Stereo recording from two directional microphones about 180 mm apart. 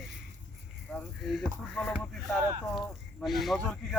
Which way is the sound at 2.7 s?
Centre (ahead or behind).